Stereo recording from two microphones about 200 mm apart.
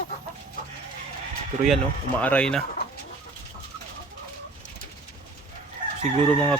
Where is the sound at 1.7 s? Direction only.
5° left (ahead or behind).